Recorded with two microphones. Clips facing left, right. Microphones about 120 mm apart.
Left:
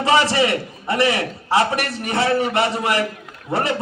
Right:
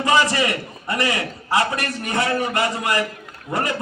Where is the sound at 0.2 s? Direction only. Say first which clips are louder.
Left 2 dB; 20° left (ahead or behind).